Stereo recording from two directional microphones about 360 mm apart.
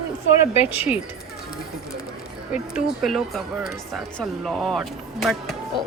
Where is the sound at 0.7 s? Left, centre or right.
Centre.